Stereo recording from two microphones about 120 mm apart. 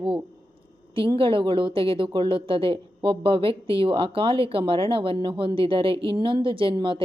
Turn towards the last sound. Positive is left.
turn(degrees=-45)  # may be behind; listen again after turning